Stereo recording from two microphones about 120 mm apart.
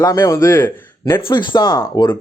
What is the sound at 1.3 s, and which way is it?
Speech, 40° left (ahead or behind).